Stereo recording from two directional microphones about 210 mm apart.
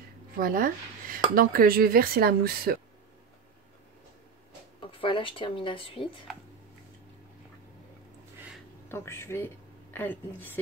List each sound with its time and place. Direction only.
0.4 s speech: 40° right (ahead or behind)
4.7 s speech: 25° left (ahead or behind)
8.8 s a woman's voice: 10° left (ahead or behind)